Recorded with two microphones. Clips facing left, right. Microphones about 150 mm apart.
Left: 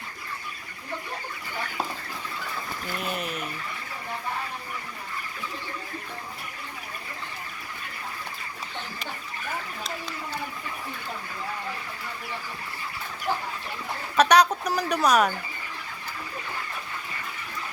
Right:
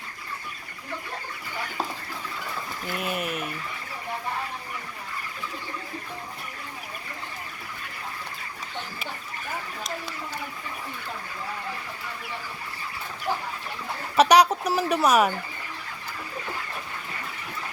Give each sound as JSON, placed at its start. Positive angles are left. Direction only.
{"t": 2.9, "sound": "speech", "side_deg": -5}
{"t": 14.2, "sound": "speech", "side_deg": -10}